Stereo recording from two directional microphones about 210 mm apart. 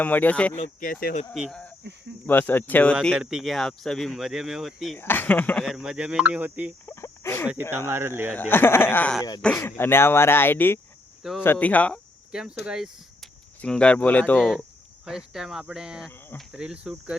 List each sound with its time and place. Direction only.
0.0 s speech: 5° left (ahead or behind)
0.5 s speech: 35° left (ahead or behind)
1.3 s speech: centre (ahead or behind)
4.9 s speech: 10° left (ahead or behind); by 6.7 s 5° right (ahead or behind)
6.8 s a sound: 15° left (ahead or behind)
7.7 s speech: 10° right (ahead or behind)
8.3 s speech: 10° left (ahead or behind)
11.2 s speech: centre (ahead or behind)